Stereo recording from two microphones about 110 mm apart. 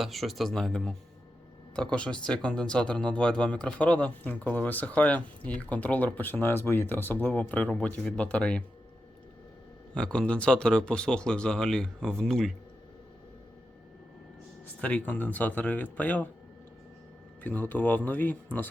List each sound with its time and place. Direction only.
0.0 s speech: centre (ahead or behind)
9.9 s speech: 10° left (ahead or behind)
14.8 s speech: 10° left (ahead or behind)
17.4 s speech: 15° left (ahead or behind)